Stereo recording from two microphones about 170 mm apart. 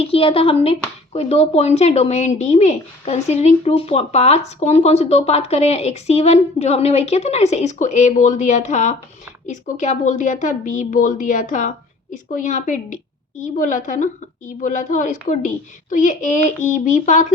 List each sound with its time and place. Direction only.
0.0 s a woman's voice: 35° left (ahead or behind)